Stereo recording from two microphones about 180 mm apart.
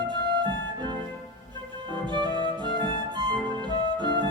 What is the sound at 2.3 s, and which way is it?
Music, 25° left (ahead or behind).